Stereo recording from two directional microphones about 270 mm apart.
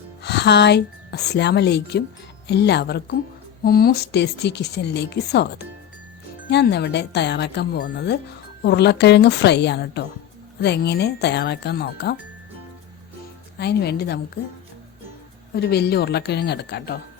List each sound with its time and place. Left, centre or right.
0.2 s a woman's voice: left
13.6 s a woman's voice: left
15.5 s a woman's voice: left